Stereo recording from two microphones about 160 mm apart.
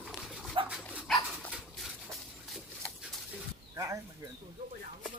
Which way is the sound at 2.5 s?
Centre (ahead or behind).